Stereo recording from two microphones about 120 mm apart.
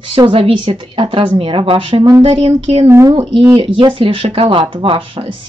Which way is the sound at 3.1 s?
40° right (ahead or behind).